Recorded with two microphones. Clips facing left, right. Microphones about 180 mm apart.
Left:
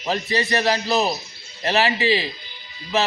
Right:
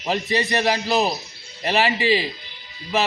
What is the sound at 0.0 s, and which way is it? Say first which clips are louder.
A man's voice: right 1 dB; 15° right (ahead or behind).